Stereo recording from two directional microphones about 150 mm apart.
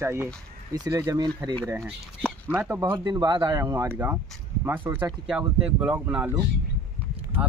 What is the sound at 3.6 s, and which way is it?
Speech, 15° right (ahead or behind).